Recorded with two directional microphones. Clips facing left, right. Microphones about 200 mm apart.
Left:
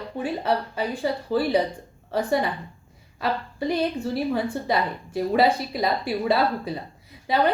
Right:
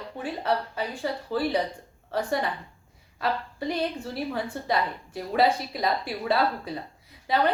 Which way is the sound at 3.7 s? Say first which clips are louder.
Left 5 dB; 5° left (ahead or behind).